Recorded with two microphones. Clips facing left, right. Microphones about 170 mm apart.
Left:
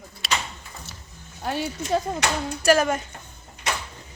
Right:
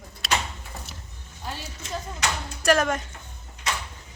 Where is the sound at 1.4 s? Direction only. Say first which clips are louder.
Left 9 dB; 65° left (ahead or behind).